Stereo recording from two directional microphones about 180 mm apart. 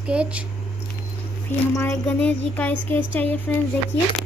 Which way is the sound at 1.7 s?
15° left (ahead or behind).